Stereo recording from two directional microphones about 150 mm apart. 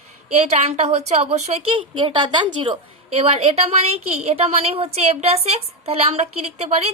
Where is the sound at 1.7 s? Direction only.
35° right (ahead or behind).